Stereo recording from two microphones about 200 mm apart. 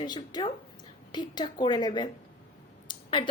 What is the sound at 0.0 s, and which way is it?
A woman's voice, 20° left (ahead or behind).